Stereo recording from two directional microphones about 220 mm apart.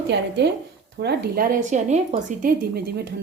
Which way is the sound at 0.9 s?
50° right (ahead or behind).